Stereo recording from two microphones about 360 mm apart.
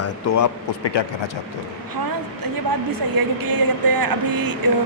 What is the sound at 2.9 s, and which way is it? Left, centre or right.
Speech, right.